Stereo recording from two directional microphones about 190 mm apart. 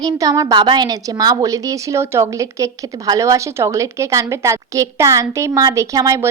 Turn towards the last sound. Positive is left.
turn(degrees=-15)  # may be behind; listen again after turning